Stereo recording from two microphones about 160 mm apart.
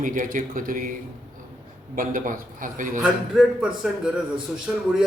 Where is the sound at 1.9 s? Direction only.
60° right (ahead or behind).